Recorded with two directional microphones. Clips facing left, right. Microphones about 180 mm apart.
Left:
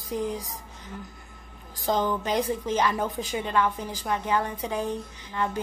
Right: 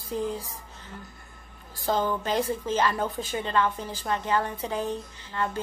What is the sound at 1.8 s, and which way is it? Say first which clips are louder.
A woman's voice: left 1 dB; 15° left (ahead or behind).